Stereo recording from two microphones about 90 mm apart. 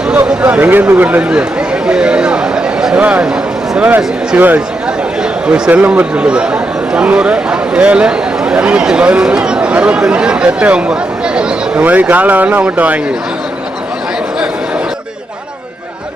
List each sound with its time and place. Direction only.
0.4 s a man's voice: 20° right (ahead or behind)